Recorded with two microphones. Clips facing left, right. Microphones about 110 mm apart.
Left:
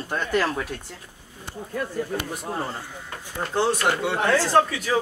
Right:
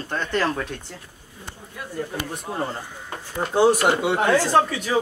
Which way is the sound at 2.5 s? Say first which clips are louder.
Right 1 dB; 5° right (ahead or behind).